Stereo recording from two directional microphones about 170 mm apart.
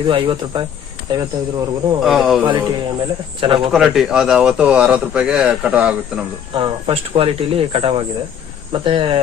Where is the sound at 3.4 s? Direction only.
30° right (ahead or behind).